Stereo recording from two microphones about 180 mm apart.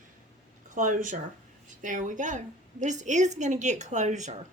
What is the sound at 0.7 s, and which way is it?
A woman's voice, 45° right (ahead or behind).